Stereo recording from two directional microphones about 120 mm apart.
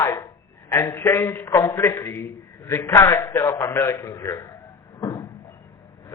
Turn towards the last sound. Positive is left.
turn(degrees=30)  # may be behind; listen again after turning